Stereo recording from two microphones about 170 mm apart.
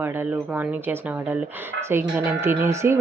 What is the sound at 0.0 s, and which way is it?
Speech, 15° right (ahead or behind).